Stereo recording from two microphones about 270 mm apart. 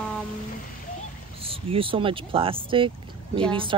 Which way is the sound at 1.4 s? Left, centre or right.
Centre.